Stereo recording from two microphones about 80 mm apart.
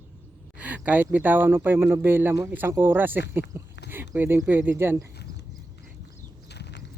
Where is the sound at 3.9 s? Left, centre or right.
Right.